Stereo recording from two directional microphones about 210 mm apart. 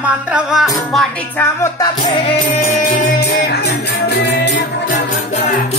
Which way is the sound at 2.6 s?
40° left (ahead or behind).